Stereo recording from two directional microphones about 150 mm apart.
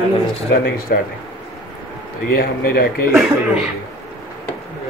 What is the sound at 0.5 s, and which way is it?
Speech, 80° left.